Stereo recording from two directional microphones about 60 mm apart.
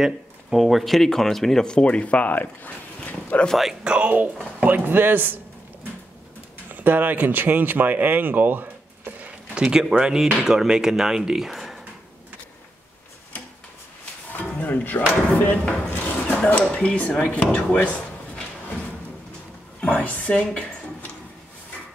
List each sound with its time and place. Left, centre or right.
0.0 s speech: centre; by 3.4 s left
3.8 s speech: centre
4.6 s speech: right
6.7 s speech: right
9.6 s speech: centre
14.6 s a woman's voice: left
19.8 s a woman's voice: left